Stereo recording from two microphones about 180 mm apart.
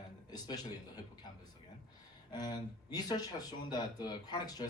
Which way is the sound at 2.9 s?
20° left (ahead or behind).